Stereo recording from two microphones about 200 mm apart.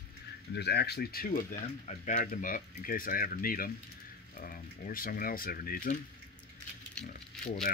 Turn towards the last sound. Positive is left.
turn(degrees=35)  # may be behind; listen again after turning